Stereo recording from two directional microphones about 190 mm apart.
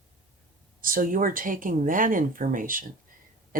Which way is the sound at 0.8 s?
45° right (ahead or behind).